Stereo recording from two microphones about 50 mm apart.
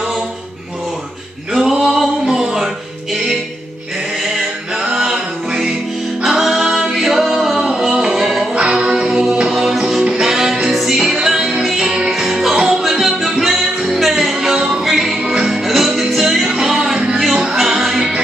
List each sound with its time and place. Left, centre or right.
1.5 s male singing: centre
2.2 s music: centre
4.8 s music: centre
14.3 s music: centre